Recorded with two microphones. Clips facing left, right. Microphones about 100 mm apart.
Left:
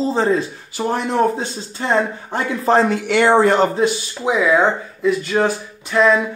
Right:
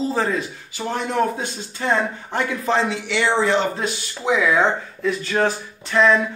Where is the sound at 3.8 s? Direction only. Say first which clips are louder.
Left 8 dB; 15° left (ahead or behind).